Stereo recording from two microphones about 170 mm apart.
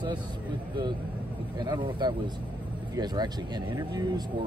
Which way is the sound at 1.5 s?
25° right (ahead or behind).